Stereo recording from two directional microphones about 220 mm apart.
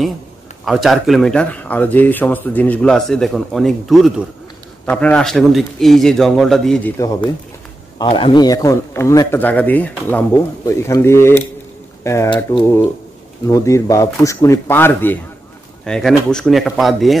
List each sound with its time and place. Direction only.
0.7 s speech: centre (ahead or behind)
7.0 s speech: 15° left (ahead or behind); by 17.2 s centre (ahead or behind)